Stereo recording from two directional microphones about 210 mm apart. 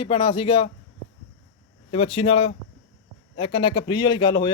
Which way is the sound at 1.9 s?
25° left (ahead or behind).